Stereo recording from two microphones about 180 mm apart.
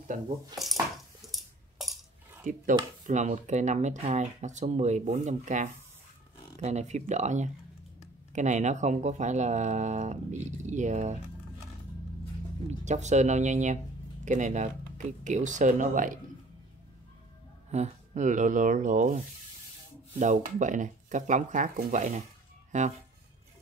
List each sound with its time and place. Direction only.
1.2 s a sound: centre (ahead or behind)
2.4 s speech: 45° right (ahead or behind)
12.6 s speech: 40° right (ahead or behind)
17.6 s speech: 40° right (ahead or behind)